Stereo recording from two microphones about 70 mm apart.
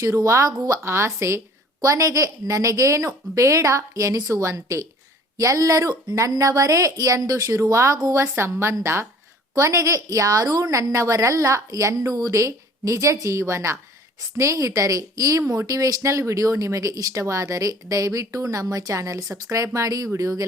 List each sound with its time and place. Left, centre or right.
0.2 s speech: right
0.9 s a woman's voice: right
1.8 s a woman's voice: right
9.6 s speech: right